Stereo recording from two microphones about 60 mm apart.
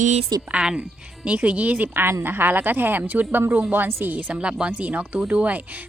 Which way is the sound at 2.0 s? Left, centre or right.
Right.